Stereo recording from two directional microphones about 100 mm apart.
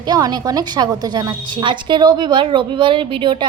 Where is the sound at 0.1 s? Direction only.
40° right (ahead or behind).